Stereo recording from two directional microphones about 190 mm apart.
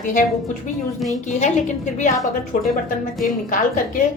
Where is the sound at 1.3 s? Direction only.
40° left (ahead or behind).